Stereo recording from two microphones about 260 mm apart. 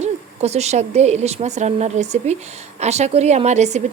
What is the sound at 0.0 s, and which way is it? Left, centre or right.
A woman's voice, right.